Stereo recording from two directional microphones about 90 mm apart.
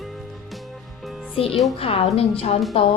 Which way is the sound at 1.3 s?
90° left.